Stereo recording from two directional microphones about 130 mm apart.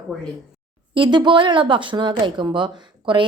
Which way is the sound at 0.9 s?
35° right (ahead or behind).